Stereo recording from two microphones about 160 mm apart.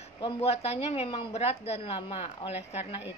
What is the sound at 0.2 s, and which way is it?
A woman's voice, 40° left (ahead or behind).